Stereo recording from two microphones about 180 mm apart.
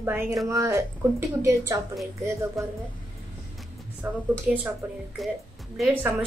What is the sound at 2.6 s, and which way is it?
Speech, centre (ahead or behind).